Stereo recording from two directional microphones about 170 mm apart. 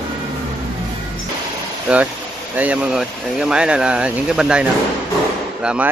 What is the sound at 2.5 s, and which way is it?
Speech, 10° right (ahead or behind).